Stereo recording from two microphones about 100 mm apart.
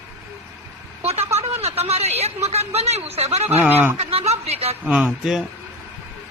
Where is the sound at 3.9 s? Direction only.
90° right.